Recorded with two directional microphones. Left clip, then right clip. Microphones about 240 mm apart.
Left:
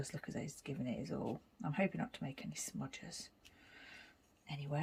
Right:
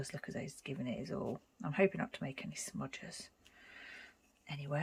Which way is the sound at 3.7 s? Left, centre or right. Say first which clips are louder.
Right 4 dB; centre.